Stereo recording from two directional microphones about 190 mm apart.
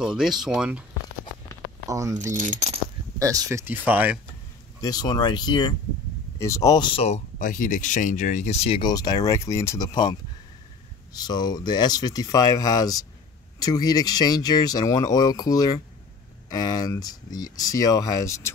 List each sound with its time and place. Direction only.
0.0 s speech: 5° right (ahead or behind)
1.9 s speech: 15° right (ahead or behind)
2.3 s speech: 40° right (ahead or behind)
3.2 s speech: 15° right (ahead or behind)
4.8 s speech: 20° left (ahead or behind)
11.1 s speech: 20° left (ahead or behind)